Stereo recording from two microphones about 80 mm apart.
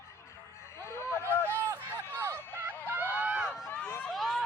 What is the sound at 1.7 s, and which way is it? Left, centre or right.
Run, right.